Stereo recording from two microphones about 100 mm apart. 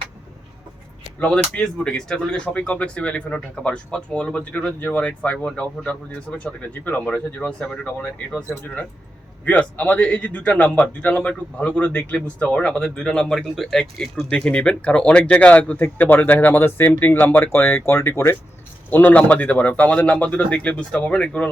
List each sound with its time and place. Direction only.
1.5 s speech: 10° left (ahead or behind)